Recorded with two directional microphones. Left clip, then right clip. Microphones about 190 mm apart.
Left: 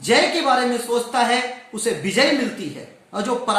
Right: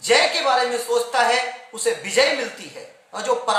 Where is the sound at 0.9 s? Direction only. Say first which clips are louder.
Right 2 dB; 20° right (ahead or behind).